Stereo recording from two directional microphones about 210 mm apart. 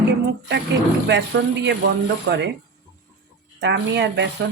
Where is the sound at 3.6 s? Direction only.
55° right (ahead or behind).